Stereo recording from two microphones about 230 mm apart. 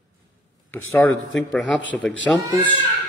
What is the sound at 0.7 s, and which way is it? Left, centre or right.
A man's voice, centre.